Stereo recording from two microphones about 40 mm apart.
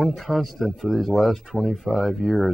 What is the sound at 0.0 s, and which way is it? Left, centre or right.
Speech, centre.